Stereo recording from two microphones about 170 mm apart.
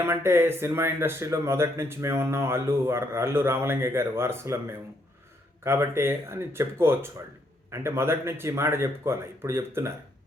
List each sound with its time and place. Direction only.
0.0 s speech: 15° right (ahead or behind)